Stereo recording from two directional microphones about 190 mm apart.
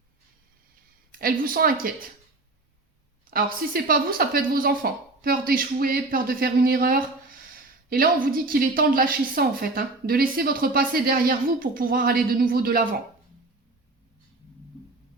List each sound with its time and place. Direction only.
1.2 s a woman's voice: 50° right (ahead or behind)
3.2 s a woman's voice: 50° right (ahead or behind)